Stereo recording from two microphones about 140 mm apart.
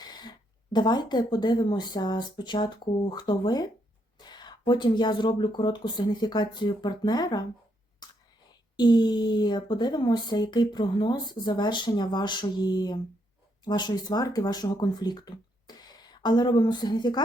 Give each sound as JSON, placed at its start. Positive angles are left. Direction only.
{"t": 0.0, "sound": "speech", "side_deg": 30}
{"t": 8.0, "sound": "whispering", "side_deg": 30}
{"t": 8.7, "sound": "speech", "side_deg": 30}